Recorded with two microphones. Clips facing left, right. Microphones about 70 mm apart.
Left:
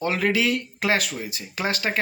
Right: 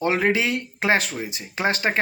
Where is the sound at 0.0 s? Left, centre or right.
Right.